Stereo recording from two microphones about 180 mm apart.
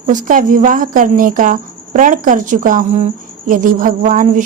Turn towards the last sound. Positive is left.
turn(degrees=-45)  # may be behind; listen again after turning